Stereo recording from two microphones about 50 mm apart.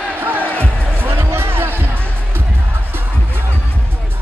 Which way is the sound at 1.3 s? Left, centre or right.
Right.